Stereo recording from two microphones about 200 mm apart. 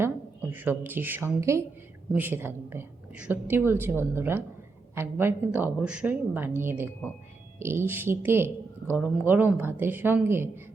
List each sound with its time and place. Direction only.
0.5 s a woman's voice: 10° right (ahead or behind)